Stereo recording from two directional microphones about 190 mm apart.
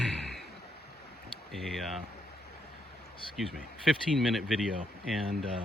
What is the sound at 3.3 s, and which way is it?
Speech, centre (ahead or behind).